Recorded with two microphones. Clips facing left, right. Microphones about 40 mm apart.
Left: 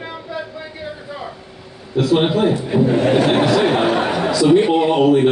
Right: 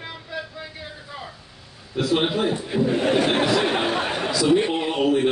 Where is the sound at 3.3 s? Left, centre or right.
Centre.